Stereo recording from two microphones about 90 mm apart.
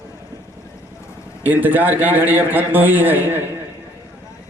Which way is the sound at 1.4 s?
20° right (ahead or behind).